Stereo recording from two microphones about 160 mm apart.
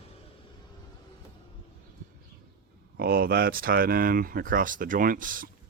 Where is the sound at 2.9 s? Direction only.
70° right (ahead or behind).